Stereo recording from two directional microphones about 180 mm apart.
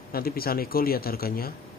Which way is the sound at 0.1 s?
55° left (ahead or behind).